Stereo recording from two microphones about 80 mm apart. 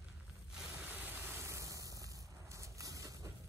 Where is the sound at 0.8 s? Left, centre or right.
Right.